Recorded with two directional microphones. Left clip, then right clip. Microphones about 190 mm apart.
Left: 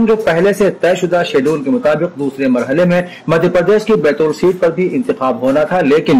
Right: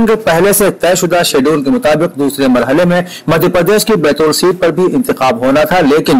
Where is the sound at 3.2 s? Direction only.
25° right (ahead or behind).